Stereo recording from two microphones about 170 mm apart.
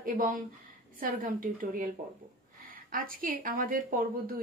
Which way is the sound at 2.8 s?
55° right (ahead or behind).